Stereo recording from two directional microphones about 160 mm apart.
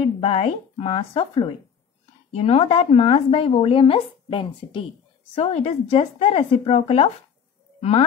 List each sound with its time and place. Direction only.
0.2 s speech: 40° left (ahead or behind)
5.3 s speech: 40° left (ahead or behind)